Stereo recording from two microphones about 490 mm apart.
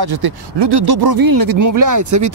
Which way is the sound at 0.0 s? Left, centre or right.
Right.